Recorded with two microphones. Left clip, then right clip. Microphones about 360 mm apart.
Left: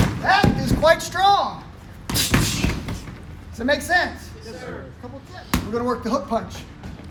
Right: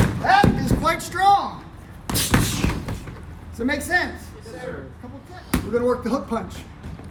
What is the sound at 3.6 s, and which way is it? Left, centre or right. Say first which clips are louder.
Speech: left 3 dB; centre.